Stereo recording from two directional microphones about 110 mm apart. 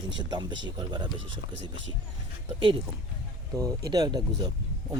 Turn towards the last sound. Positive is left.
turn(degrees=-40)  # may be behind; listen again after turning